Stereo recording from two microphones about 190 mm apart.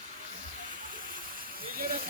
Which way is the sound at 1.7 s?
50° right (ahead or behind).